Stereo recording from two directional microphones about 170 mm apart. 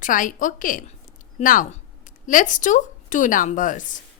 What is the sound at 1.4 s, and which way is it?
A woman's voice, 50° left (ahead or behind).